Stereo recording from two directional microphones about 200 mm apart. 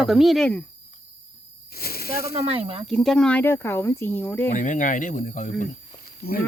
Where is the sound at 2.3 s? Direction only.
30° right (ahead or behind).